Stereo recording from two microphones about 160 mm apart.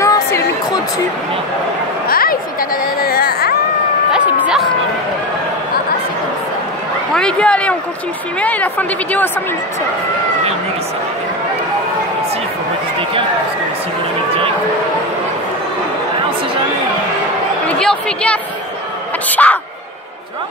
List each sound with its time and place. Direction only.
0.0 s a sound: 20° left (ahead or behind)
2.0 s speech: 65° left (ahead or behind)
7.2 s a woman's voice: 5° left (ahead or behind)
17.6 s a woman's voice: 5° left (ahead or behind)